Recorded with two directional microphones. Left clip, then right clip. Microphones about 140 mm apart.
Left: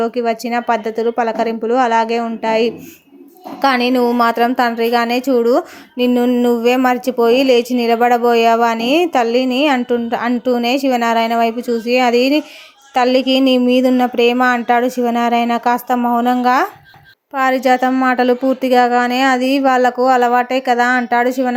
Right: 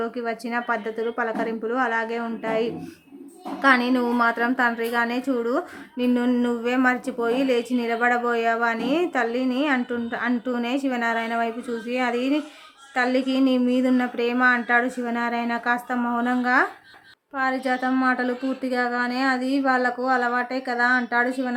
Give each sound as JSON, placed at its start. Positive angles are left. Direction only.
{"t": 0.0, "sound": "speech", "side_deg": 30}